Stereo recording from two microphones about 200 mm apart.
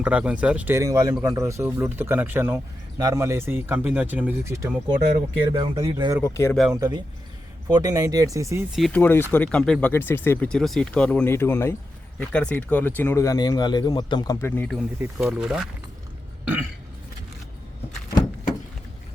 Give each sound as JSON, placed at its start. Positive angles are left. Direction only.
{"t": 0.0, "sound": "speech", "side_deg": -5}
{"t": 6.2, "sound": "speech", "side_deg": 15}
{"t": 6.7, "sound": "speech", "side_deg": -20}
{"t": 8.7, "sound": "speech", "side_deg": 5}
{"t": 14.9, "sound": "speech", "side_deg": -10}